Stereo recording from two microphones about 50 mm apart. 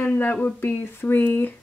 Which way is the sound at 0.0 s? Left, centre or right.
Left.